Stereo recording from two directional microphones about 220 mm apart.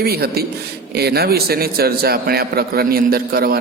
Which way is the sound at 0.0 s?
45° right (ahead or behind).